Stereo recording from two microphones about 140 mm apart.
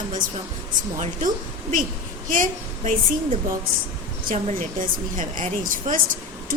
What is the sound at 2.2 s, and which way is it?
Speech, 75° right (ahead or behind).